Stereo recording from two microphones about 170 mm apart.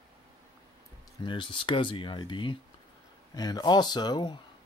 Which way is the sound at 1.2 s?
30° left (ahead or behind).